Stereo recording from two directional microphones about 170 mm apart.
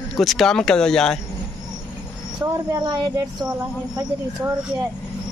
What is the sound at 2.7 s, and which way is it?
Speech, 25° right (ahead or behind).